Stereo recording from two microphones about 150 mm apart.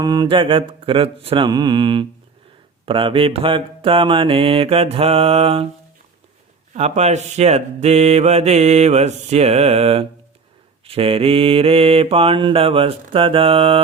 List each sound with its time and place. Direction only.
0.0 s mantra: 25° right (ahead or behind); by 5.6 s 40° right (ahead or behind)
6.7 s mantra: 45° right (ahead or behind)